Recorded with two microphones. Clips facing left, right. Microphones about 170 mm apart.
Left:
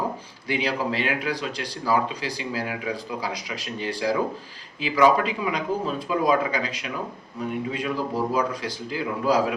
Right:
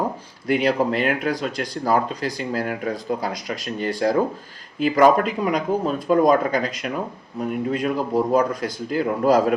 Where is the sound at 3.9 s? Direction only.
50° right (ahead or behind).